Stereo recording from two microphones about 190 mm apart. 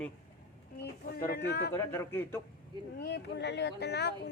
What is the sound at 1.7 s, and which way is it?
Speech, 15° left (ahead or behind).